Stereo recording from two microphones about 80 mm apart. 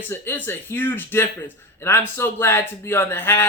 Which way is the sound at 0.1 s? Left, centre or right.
Left.